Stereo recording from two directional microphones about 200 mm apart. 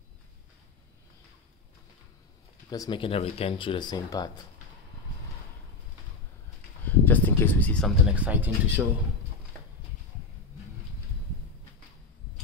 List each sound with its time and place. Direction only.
2.7 s speech: 20° left (ahead or behind)
6.8 s a sound: 10° left (ahead or behind)
8.1 s speech: 5° right (ahead or behind)